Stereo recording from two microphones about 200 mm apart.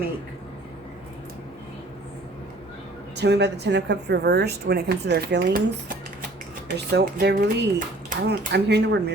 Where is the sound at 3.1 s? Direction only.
60° right (ahead or behind).